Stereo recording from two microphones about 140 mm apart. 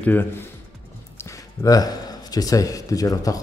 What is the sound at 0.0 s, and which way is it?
Speech, 15° left (ahead or behind).